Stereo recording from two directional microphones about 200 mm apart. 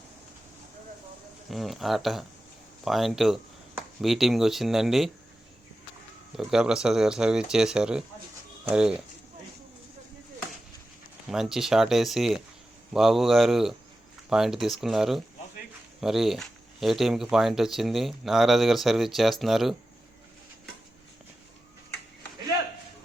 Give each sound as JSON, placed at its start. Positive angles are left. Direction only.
{"t": 1.5, "sound": "speech", "side_deg": 0}
{"t": 6.3, "sound": "speech", "side_deg": -5}
{"t": 11.3, "sound": "speech", "side_deg": 0}